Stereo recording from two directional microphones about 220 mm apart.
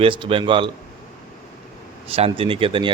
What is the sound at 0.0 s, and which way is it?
Speech, 25° right (ahead or behind).